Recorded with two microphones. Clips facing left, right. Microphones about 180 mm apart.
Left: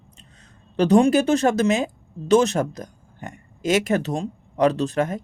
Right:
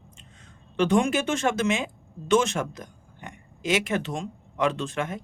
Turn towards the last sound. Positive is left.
turn(degrees=40)  # may be behind; listen again after turning